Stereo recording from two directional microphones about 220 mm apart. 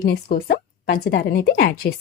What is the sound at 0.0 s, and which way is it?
A woman's voice, 40° left (ahead or behind).